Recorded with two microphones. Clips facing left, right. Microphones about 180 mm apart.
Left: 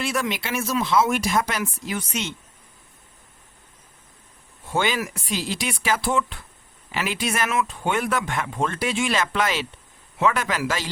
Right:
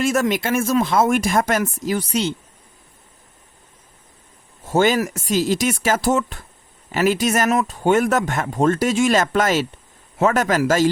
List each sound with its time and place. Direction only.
0.0 s speech: 45° right (ahead or behind)
4.6 s speech: 45° right (ahead or behind)